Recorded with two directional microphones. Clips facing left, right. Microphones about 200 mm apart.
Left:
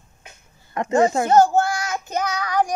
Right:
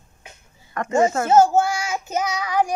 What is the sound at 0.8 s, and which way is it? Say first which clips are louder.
Speech: left 2 dB; 25° left (ahead or behind).